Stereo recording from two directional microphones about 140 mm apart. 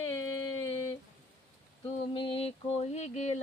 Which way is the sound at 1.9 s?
40° left (ahead or behind).